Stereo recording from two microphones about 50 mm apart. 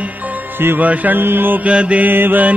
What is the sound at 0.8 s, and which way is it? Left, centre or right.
Mantra, right.